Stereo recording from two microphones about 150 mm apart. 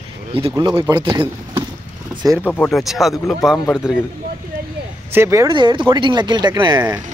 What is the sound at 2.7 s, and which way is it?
Speech, centre (ahead or behind).